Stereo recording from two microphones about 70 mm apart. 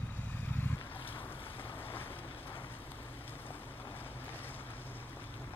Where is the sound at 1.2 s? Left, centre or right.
Left.